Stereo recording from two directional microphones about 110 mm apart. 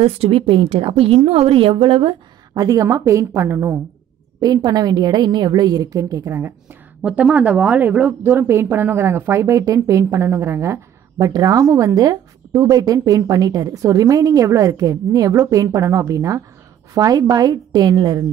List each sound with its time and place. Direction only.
0.0 s a woman's voice: 60° right (ahead or behind)
2.5 s a woman's voice: 35° right (ahead or behind)
4.6 s speech: 35° right (ahead or behind)
7.0 s speech: 10° right (ahead or behind); by 18.2 s 40° right (ahead or behind)